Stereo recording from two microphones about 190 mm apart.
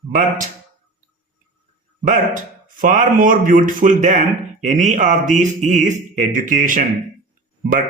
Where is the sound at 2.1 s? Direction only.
40° right (ahead or behind).